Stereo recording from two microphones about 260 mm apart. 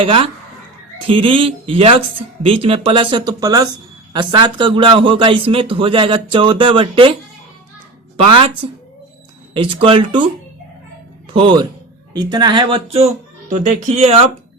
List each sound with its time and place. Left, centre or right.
0.0 s a man's voice: centre
9.6 s a man's voice: centre
11.3 s a man's voice: centre